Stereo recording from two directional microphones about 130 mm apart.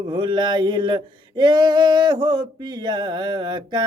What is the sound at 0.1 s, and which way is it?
Female singing, 35° right (ahead or behind).